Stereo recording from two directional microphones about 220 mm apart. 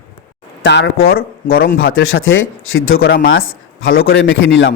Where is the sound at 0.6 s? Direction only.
50° left (ahead or behind).